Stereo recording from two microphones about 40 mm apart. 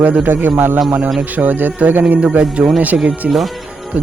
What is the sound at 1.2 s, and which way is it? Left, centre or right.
Speech, right.